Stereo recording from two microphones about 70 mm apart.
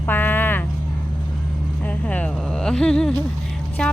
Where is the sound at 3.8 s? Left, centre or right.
Centre.